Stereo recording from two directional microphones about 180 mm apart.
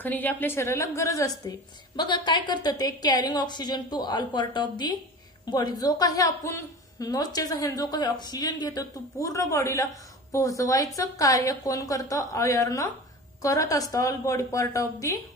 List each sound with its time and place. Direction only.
0.0 s a woman's voice: 10° left (ahead or behind)